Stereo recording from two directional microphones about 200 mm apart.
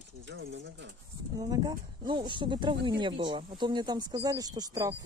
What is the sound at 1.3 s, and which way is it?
Speech, 20° right (ahead or behind).